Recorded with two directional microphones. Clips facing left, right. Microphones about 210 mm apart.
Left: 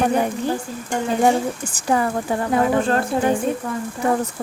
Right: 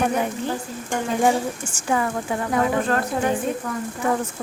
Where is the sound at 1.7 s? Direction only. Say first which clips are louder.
Left 3 dB; 35° left (ahead or behind).